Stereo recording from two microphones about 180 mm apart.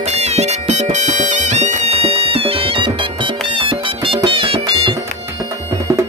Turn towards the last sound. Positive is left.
turn(degrees=-15)  # may be behind; listen again after turning